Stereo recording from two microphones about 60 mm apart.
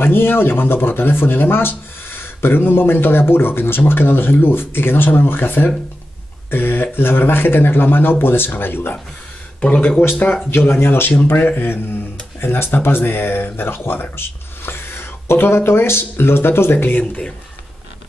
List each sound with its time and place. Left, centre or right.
0.0 s speech: left
10.0 s speech: left
10.5 s speech: left
16.7 s speech: left